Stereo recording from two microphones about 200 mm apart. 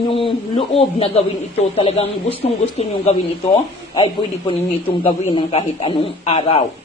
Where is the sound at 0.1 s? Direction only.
25° left (ahead or behind).